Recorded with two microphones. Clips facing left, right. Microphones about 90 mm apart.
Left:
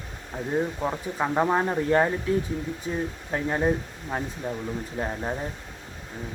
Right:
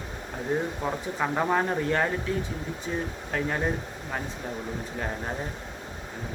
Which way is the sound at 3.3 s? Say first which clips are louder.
Left 2 dB; 20° left (ahead or behind).